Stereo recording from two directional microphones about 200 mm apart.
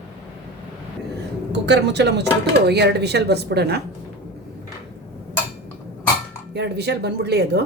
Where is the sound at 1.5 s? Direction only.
60° right (ahead or behind).